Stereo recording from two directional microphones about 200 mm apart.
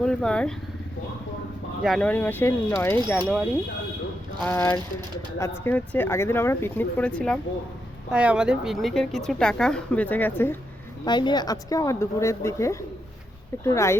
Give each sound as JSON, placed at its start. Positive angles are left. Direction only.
{"t": 0.0, "sound": "speech", "side_deg": 5}
{"t": 1.8, "sound": "speech", "side_deg": 5}
{"t": 4.4, "sound": "speech", "side_deg": 15}
{"t": 8.1, "sound": "a woman's voice", "side_deg": -5}
{"t": 11.0, "sound": "speech", "side_deg": 20}